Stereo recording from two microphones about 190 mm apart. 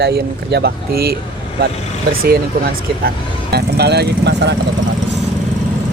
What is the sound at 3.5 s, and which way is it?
Speech, 60° right (ahead or behind).